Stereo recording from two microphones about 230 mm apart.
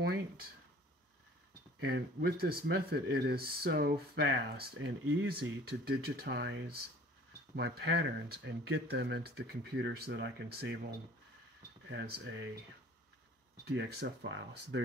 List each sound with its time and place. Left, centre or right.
0.0 s a sound: right
1.8 s speech: right
4.7 s speech: right
5.3 s speech: right
11.9 s speech: right
13.7 s speech: right